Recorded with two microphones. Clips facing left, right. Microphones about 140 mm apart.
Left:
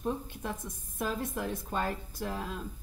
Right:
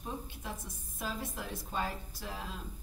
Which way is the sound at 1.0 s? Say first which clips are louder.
Left 6 dB; 55° left (ahead or behind).